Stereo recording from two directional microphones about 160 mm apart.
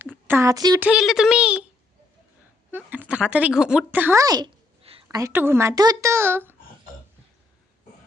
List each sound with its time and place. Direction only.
0.3 s speech: 20° right (ahead or behind)
0.8 s speech: 5° right (ahead or behind)
2.7 s speech: 10° right (ahead or behind); by 4.9 s 30° right (ahead or behind)
5.0 s speech: 15° right (ahead or behind)